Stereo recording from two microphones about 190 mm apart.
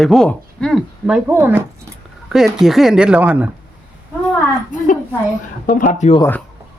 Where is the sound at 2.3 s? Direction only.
Centre (ahead or behind).